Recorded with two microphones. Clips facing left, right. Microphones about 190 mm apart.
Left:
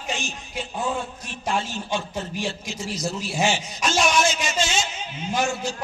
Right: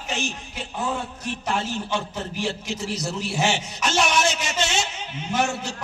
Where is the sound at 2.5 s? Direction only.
65° right (ahead or behind).